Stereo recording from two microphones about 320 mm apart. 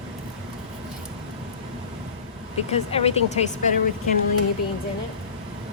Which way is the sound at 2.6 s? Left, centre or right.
Centre.